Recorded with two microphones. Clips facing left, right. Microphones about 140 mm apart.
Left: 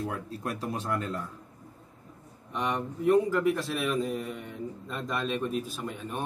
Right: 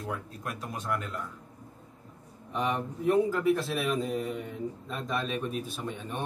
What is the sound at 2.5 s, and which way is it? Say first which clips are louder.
A man's voice: even; centre (ahead or behind).